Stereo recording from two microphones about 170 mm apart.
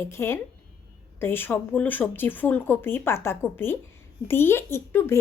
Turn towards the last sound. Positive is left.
turn(degrees=15)  # may be behind; listen again after turning